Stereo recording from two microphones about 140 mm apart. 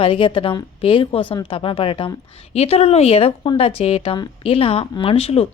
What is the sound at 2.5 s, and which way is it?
A woman's voice, 50° left (ahead or behind).